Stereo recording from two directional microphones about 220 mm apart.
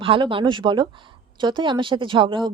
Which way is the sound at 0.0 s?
25° right (ahead or behind).